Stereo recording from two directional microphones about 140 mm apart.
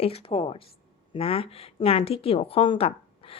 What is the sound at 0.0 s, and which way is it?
A woman's voice, 40° left (ahead or behind).